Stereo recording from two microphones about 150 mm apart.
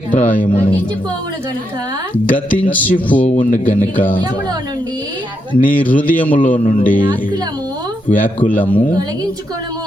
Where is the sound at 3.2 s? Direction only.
40° left (ahead or behind).